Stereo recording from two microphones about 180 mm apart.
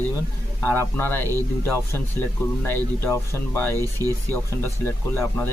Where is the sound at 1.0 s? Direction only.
10° left (ahead or behind).